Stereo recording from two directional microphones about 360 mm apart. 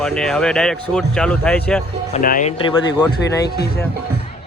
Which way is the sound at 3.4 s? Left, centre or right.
Left.